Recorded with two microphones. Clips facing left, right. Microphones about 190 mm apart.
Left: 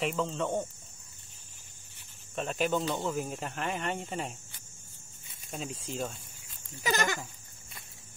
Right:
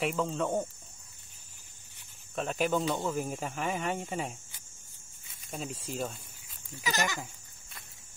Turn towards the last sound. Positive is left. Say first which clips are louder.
# left 2 dB
turn(degrees=55)  # may be behind; listen again after turning